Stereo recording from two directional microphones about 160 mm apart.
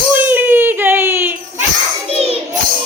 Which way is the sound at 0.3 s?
10° right (ahead or behind).